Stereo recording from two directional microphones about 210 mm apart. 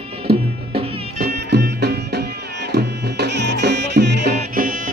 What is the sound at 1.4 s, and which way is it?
Music, 50° right (ahead or behind).